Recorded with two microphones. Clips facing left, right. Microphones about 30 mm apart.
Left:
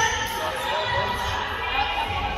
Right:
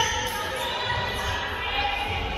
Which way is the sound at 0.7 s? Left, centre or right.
Centre.